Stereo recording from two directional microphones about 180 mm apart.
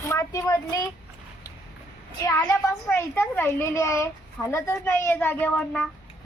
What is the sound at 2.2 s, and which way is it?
A child's voice, 20° left (ahead or behind).